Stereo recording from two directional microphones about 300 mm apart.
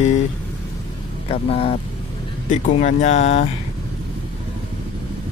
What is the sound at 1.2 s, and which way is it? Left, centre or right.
Speech, centre.